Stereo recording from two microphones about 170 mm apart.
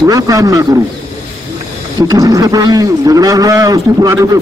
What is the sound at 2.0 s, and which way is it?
Speech, 20° right (ahead or behind).